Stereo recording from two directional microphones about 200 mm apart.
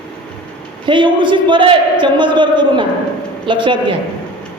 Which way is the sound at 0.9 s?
25° right (ahead or behind).